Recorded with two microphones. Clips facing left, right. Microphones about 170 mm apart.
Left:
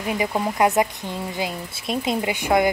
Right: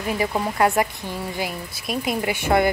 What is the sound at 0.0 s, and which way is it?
Speech, 15° left (ahead or behind).